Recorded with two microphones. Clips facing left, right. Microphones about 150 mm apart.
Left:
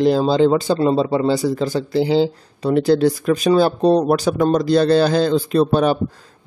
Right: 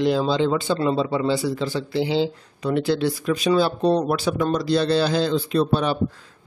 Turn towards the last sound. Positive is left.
turn(degrees=45)  # may be behind; listen again after turning